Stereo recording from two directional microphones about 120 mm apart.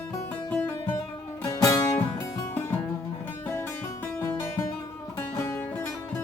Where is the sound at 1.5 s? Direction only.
30° left (ahead or behind).